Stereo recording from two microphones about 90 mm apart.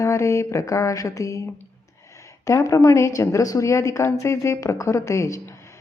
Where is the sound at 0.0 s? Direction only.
30° left (ahead or behind).